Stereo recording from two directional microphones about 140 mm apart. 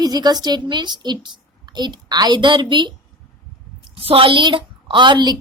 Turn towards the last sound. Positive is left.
turn(degrees=-30)  # may be behind; listen again after turning